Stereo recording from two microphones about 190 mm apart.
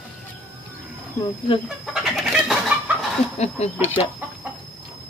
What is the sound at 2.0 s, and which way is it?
Bird, centre (ahead or behind).